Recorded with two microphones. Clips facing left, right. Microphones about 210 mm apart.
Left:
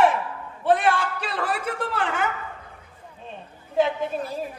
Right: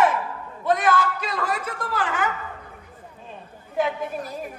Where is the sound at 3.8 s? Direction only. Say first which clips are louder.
Left 2 dB; 25° left (ahead or behind).